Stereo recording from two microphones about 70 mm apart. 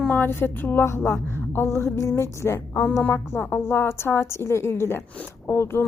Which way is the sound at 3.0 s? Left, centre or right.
Left.